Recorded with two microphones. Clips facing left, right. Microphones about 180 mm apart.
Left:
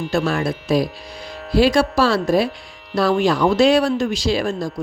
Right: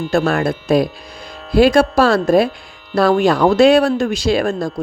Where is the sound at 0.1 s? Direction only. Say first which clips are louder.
Right 5 dB; 55° right (ahead or behind).